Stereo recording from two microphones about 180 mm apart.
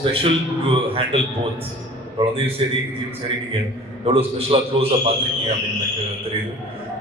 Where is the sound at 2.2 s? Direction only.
30° right (ahead or behind).